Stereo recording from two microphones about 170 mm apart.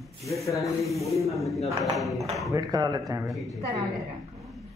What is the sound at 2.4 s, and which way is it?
Speech, 20° right (ahead or behind).